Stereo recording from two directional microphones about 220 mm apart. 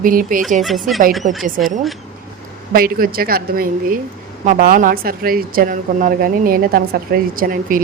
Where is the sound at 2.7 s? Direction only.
40° right (ahead or behind).